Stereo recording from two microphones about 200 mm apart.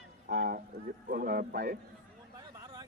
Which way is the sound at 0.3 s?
45° right (ahead or behind).